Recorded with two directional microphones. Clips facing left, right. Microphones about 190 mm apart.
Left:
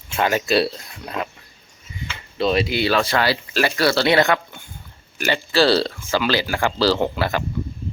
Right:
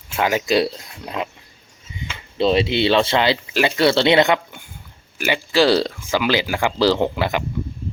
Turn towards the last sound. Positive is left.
turn(degrees=-15)  # may be behind; listen again after turning